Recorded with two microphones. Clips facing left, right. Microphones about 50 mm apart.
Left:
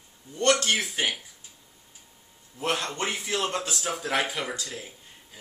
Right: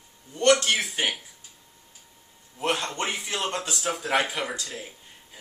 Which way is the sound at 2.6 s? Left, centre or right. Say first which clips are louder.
Right 1 dB; centre.